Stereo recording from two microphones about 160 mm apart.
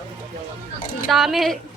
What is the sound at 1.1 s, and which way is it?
Speech, centre (ahead or behind).